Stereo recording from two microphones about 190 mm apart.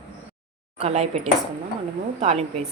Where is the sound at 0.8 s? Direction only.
35° right (ahead or behind).